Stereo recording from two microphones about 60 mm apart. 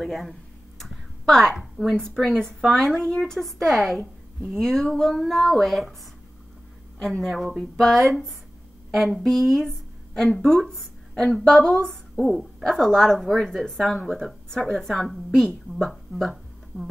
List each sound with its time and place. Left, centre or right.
0.0 s a sound: centre
1.5 s a woman's voice: centre
7.0 s a woman's voice: centre
12.2 s a woman's voice: centre